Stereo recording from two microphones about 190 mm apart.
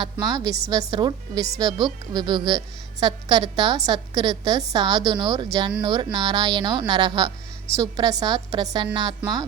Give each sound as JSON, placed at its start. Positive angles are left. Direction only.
{"t": 0.0, "sound": "a woman's voice", "side_deg": -20}